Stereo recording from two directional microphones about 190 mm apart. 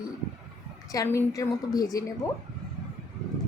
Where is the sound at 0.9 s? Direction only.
15° left (ahead or behind).